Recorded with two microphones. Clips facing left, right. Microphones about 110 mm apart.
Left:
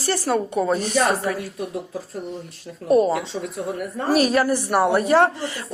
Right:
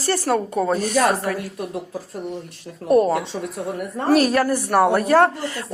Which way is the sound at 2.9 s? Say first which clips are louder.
Right 1 dB; 50° right (ahead or behind).